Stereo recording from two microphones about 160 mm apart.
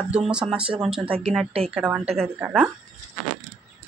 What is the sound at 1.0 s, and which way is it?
Speech, 35° right (ahead or behind).